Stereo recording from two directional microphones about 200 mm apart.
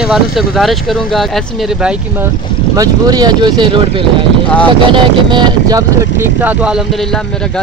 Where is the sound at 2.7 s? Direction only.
20° right (ahead or behind).